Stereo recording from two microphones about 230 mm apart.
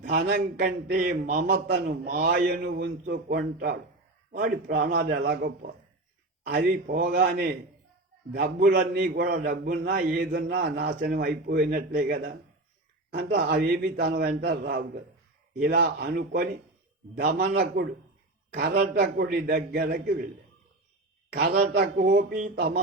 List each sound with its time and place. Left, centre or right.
0.0 s a man's voice: right
21.3 s a man's voice: right